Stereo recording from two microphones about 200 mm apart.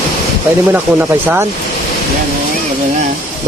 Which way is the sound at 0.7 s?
10° right (ahead or behind).